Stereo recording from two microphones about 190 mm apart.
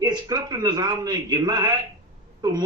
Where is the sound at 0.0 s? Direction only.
20° right (ahead or behind).